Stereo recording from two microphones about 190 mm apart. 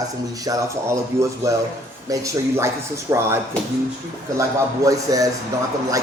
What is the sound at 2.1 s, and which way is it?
Speech, 15° right (ahead or behind).